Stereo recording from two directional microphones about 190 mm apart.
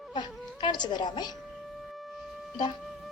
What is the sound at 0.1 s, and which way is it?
Speech, 20° left (ahead or behind).